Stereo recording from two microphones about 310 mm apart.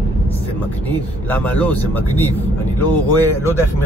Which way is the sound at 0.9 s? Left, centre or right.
Centre.